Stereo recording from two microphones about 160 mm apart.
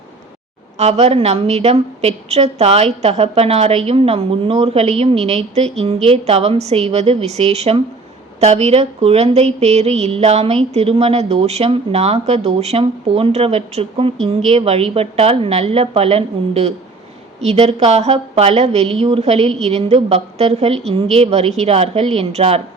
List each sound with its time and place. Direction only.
0.8 s a woman's voice: 40° right (ahead or behind)